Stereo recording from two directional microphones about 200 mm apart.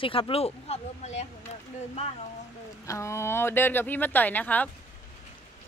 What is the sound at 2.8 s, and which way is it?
Speech, 15° left (ahead or behind).